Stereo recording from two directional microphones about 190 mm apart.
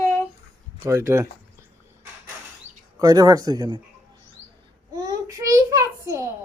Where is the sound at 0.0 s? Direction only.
10° left (ahead or behind).